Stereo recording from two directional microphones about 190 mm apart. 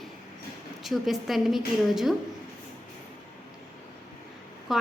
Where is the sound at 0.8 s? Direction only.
Centre (ahead or behind).